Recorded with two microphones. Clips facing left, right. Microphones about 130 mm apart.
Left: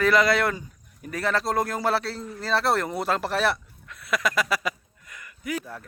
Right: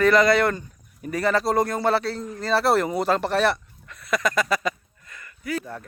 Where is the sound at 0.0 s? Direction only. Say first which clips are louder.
Right 3 dB; centre (ahead or behind).